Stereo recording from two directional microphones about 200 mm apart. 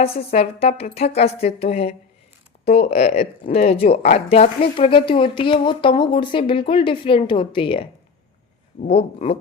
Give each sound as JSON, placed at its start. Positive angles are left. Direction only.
{"t": 0.3, "sound": "a woman's voice", "side_deg": 30}